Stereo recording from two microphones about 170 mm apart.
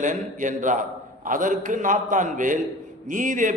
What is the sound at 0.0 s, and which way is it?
A man's voice, 50° right (ahead or behind).